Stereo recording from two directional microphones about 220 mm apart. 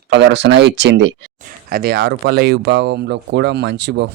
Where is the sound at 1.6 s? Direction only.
45° right (ahead or behind).